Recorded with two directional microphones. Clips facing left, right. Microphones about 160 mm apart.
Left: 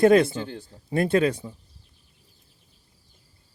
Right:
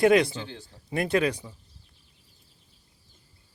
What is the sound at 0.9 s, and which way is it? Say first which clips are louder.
Speech: left 3 dB; 30° left (ahead or behind).